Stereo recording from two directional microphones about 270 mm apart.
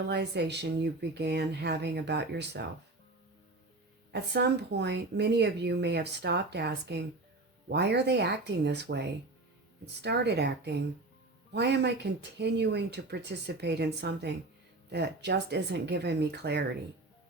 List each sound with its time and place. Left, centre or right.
0.1 s speech: right
4.1 s speech: right